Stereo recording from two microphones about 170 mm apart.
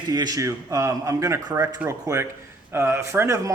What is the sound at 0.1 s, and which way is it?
Speech, 20° right (ahead or behind).